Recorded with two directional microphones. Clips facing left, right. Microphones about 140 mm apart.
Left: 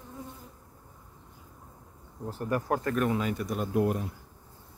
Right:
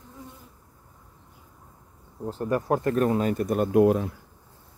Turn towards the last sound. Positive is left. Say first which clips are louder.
# right 8 dB
turn(degrees=-90)